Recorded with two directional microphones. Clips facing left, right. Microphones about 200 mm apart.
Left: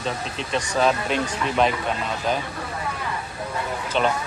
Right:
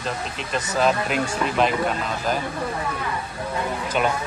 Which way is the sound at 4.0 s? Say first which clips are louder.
Left 1 dB; 10° right (ahead or behind).